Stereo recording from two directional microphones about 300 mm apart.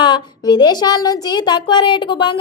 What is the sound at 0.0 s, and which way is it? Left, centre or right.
A woman's voice, centre.